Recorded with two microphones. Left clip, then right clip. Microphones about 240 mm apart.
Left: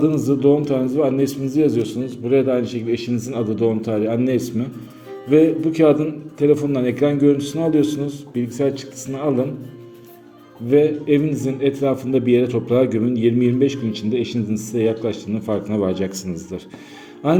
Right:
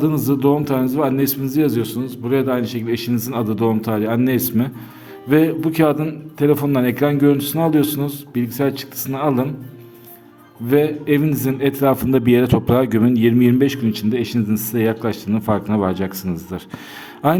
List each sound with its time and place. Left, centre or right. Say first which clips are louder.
0.0 s a man's voice: left 1 dB; right
10.7 s a man's voice: left 1 dB; right